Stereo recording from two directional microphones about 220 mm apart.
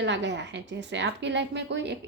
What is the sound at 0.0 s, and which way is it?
A woman's voice, 55° right (ahead or behind).